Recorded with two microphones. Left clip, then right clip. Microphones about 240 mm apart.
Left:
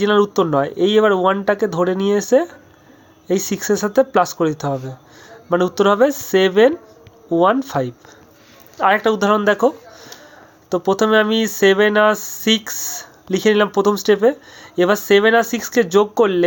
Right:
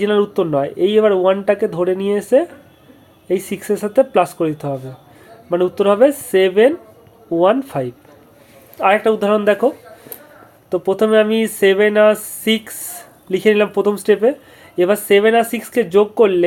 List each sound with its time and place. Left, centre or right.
0.0 s speech: left